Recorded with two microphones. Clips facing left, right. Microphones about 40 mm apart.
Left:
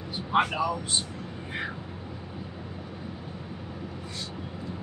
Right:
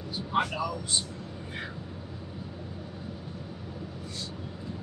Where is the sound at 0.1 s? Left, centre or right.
Left.